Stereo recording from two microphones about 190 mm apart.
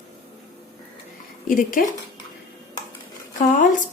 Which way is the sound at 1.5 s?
45° left (ahead or behind).